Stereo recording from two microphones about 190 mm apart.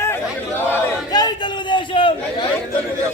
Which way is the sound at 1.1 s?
20° left (ahead or behind).